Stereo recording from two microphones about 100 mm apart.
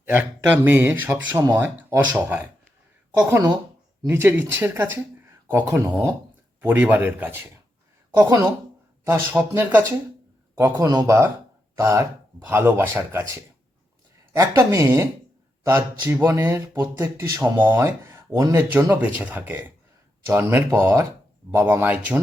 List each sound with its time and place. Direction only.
0.0 s a man's voice: 20° right (ahead or behind)
4.0 s a man's voice: 25° right (ahead or behind)
6.6 s a man's voice: 15° right (ahead or behind)
8.1 s speech: 40° right (ahead or behind)
9.0 s a man's voice: 25° right (ahead or behind)
10.8 s a man's voice: 35° right (ahead or behind); by 22.2 s 15° right (ahead or behind)